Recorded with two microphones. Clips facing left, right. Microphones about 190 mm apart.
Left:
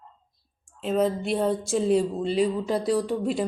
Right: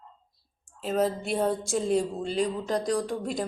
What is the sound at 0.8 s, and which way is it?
Speech, centre (ahead or behind).